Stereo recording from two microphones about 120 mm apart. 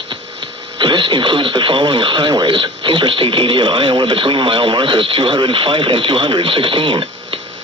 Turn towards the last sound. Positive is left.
turn(degrees=-45)  # may be behind; listen again after turning